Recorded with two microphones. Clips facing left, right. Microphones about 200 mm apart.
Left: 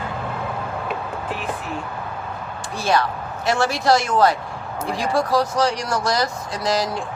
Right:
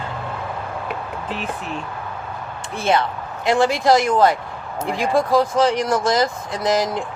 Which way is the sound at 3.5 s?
15° right (ahead or behind).